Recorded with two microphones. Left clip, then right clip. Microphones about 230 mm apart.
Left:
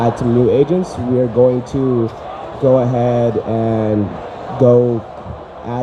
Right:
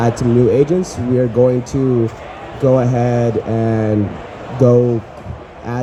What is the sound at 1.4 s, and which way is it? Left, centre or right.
Mantra, centre.